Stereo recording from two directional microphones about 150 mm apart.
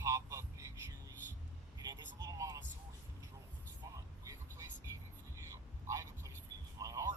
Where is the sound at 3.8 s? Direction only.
25° right (ahead or behind).